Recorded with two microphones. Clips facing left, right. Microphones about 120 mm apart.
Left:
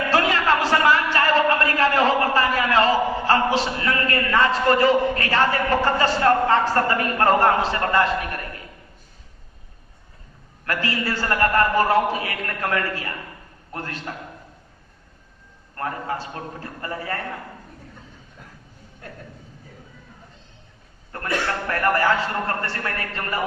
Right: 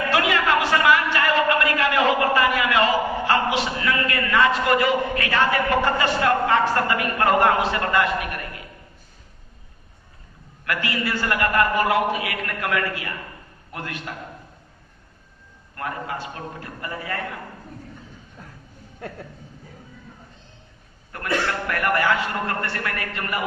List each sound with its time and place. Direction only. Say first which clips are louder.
0.1 s a sound: left 1 dB; 35° left (ahead or behind)
6.0 s a man's voice: left 2 dB; 35° left (ahead or behind)
10.7 s a man's voice: even; 35° left (ahead or behind)
15.7 s a man's voice: left 2 dB; 35° left (ahead or behind)
21.1 s a man's voice: right 1 dB; 30° left (ahead or behind)